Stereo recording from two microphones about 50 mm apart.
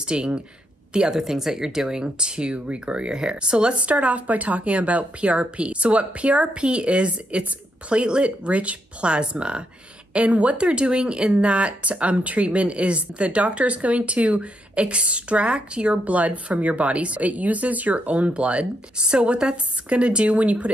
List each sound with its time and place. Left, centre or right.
0.0 s speech: centre
3.9 s speech: right